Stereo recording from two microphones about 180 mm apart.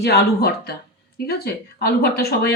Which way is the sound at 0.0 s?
65° left (ahead or behind).